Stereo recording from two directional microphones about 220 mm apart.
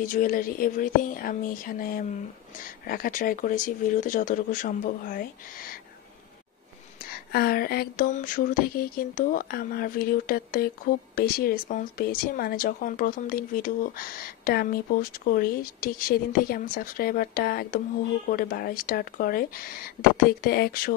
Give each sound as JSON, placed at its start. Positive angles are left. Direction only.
{"t": 0.0, "sound": "speech", "side_deg": 40}
{"t": 7.3, "sound": "speech", "side_deg": 45}